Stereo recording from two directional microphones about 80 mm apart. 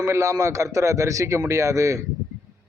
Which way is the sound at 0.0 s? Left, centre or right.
Right.